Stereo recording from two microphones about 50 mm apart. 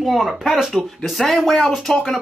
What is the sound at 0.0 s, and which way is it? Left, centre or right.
Speech, centre.